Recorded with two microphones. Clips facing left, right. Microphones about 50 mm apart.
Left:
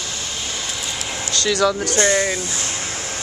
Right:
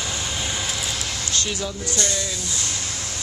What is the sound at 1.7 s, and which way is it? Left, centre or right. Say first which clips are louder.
Speech: left 9 dB; left.